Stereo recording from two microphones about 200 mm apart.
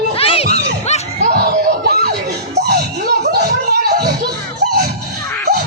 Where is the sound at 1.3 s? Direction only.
50° right (ahead or behind).